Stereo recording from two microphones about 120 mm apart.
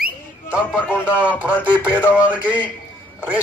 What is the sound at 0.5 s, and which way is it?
Whistling, 10° right (ahead or behind).